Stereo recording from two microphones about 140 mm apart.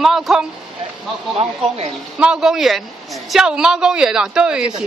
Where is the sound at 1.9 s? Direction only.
5° right (ahead or behind).